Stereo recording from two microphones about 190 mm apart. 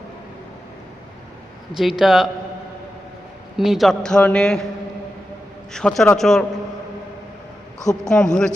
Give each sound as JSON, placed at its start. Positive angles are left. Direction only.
{"t": 1.7, "sound": "a man's voice", "side_deg": 0}
{"t": 3.6, "sound": "a man's voice", "side_deg": 0}
{"t": 5.7, "sound": "a man's voice", "side_deg": 0}
{"t": 8.0, "sound": "a man's voice", "side_deg": 5}